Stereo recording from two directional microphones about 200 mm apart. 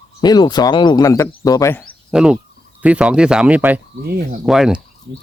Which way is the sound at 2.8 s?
5° right (ahead or behind).